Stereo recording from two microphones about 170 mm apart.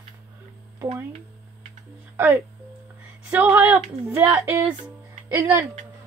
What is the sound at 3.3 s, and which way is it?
A woman's voice, 10° right (ahead or behind).